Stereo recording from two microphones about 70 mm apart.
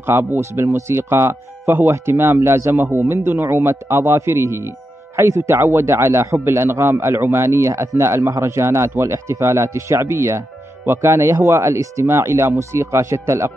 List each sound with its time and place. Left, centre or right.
0.0 s speech: right